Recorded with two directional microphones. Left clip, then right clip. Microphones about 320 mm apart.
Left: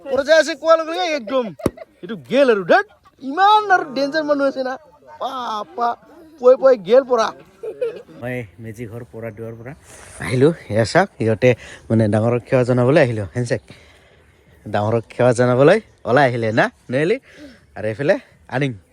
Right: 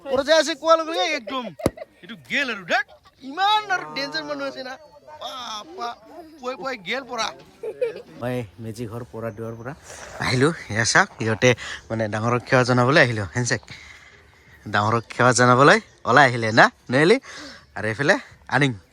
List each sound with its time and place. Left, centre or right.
0.0 s speech: centre
11.9 s speech: left
12.1 s speech: centre